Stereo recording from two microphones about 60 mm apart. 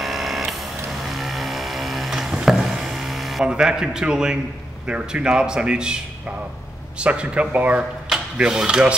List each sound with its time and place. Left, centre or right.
0.0 s a sound: centre
3.4 s speech: centre
7.0 s speech: centre